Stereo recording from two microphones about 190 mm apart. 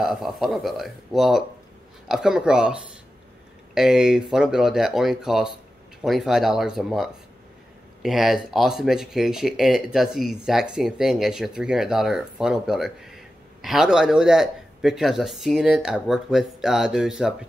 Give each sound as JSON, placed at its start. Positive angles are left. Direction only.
{"t": 0.0, "sound": "speech", "side_deg": 0}